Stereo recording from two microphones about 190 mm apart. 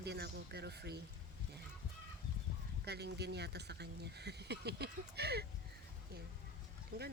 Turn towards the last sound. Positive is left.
turn(degrees=-55)  # may be behind; listen again after turning